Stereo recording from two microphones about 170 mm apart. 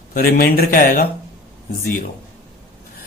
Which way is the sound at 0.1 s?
60° left (ahead or behind).